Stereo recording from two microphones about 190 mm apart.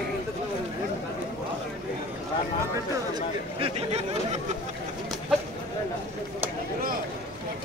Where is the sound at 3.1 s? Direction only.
30° right (ahead or behind).